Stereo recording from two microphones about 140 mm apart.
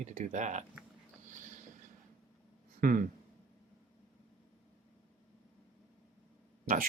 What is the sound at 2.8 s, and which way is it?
Speech, 80° right.